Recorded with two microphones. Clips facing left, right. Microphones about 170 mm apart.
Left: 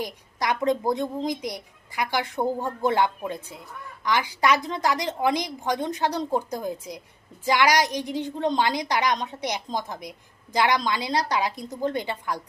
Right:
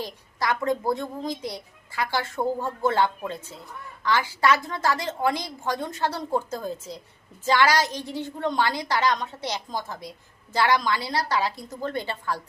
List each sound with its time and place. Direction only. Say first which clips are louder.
0.0 s a woman's voice: left 1 dB; 20° left (ahead or behind)